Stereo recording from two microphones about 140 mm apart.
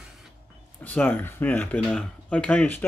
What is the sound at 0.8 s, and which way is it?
Speech, 10° left (ahead or behind).